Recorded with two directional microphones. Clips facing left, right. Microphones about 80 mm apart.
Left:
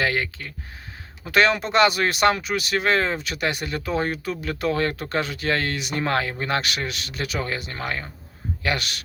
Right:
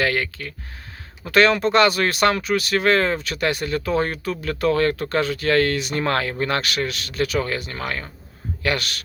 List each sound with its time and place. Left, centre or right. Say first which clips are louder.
0.0 s speech: right 2 dB; left